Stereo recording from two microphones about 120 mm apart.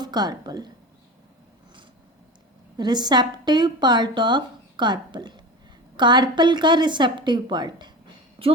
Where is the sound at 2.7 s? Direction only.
35° right (ahead or behind).